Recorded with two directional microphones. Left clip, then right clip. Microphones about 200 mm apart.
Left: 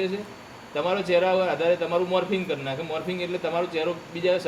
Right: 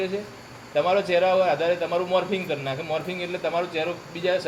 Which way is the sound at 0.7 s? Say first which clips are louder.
Right 2 dB; 20° left (ahead or behind).